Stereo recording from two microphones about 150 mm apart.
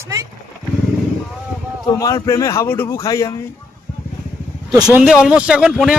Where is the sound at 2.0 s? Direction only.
20° left (ahead or behind).